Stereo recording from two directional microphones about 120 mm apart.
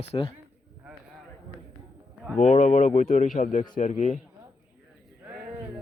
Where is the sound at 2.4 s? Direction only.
80° left.